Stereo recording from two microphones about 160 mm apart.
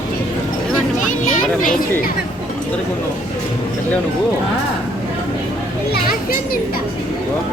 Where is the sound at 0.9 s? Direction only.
50° left (ahead or behind).